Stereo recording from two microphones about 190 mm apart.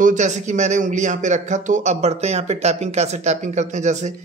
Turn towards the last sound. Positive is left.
turn(degrees=-40)  # may be behind; listen again after turning